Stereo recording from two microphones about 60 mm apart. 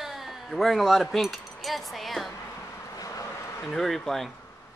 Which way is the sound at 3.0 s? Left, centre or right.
Left.